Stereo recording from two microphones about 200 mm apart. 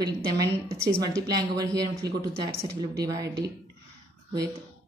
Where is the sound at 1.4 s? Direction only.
20° right (ahead or behind).